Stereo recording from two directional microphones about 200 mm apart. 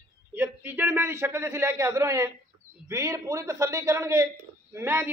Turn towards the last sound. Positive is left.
turn(degrees=-10)  # may be behind; listen again after turning